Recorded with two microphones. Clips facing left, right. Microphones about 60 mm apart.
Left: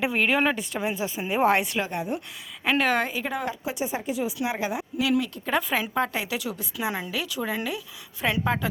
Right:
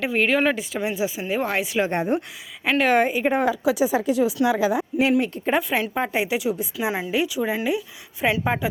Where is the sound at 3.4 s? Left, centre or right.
Right.